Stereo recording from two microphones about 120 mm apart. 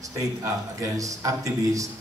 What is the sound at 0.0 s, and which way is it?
Speech, 30° right (ahead or behind).